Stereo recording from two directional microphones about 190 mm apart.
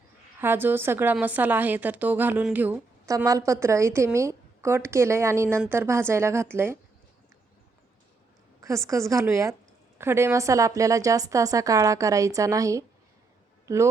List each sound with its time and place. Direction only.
0.3 s a woman's voice: 10° right (ahead or behind)
8.6 s a woman's voice: 15° right (ahead or behind)